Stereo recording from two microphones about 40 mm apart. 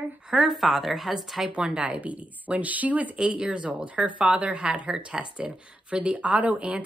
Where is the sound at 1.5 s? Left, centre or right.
Right.